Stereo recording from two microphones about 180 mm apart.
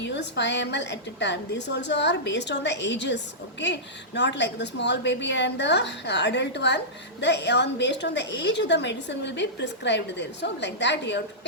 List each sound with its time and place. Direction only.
0.0 s a woman's voice: 75° left (ahead or behind)